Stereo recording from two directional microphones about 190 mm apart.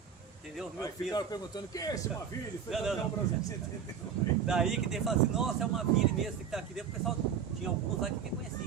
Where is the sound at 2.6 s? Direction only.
Centre (ahead or behind).